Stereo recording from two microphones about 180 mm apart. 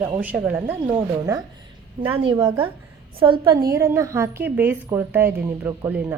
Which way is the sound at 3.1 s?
30° right (ahead or behind).